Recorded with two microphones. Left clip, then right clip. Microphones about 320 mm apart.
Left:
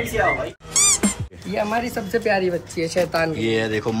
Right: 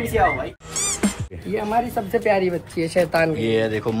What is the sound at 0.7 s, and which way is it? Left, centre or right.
Cat, centre.